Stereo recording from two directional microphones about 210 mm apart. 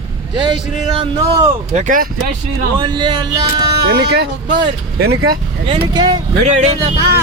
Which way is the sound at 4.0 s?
50° right (ahead or behind).